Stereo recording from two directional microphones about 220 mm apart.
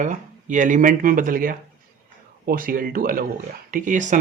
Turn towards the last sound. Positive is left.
turn(degrees=-35)  # may be behind; listen again after turning